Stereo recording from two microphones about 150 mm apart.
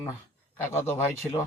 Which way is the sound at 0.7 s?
15° left (ahead or behind).